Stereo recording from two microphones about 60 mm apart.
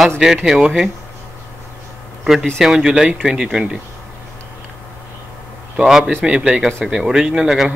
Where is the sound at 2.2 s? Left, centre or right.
Centre.